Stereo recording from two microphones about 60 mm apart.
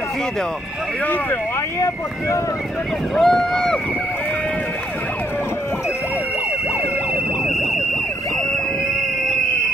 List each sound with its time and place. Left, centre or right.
1.0 s speech: left
1.8 s speech: left
3.2 s speech: centre